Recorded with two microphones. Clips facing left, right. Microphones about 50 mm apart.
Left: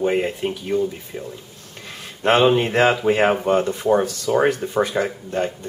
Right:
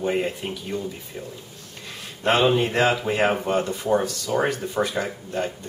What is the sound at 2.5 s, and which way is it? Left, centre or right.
Speech, left.